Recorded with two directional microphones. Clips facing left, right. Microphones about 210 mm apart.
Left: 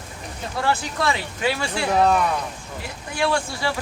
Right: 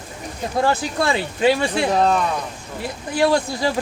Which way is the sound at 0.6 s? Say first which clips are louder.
Right 3 dB; 40° right (ahead or behind).